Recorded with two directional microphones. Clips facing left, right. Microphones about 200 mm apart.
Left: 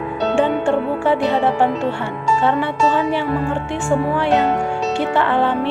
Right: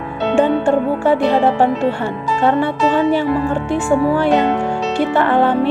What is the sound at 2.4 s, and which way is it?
Music, 40° right (ahead or behind).